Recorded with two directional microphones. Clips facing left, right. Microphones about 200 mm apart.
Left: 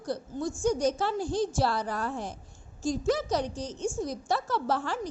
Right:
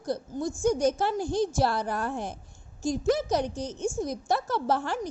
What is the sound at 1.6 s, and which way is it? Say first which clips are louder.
A woman's voice: right 2 dB; 50° right (ahead or behind).